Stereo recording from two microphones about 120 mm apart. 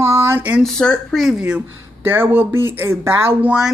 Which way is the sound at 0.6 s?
5° left (ahead or behind).